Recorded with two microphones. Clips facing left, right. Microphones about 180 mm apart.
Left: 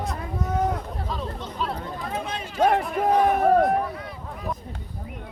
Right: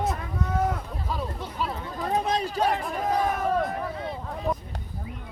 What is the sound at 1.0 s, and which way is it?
Speech, 10° right (ahead or behind).